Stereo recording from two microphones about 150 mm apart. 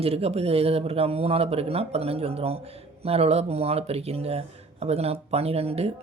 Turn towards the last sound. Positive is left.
turn(degrees=-40)  # may be behind; listen again after turning